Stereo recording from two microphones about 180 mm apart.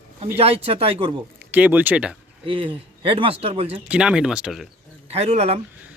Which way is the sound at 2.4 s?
30° right (ahead or behind).